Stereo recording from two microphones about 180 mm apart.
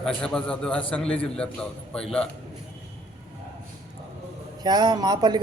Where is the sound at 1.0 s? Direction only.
30° left (ahead or behind).